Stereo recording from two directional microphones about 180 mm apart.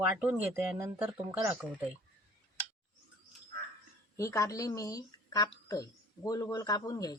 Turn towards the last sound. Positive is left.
turn(degrees=20)  # may be behind; listen again after turning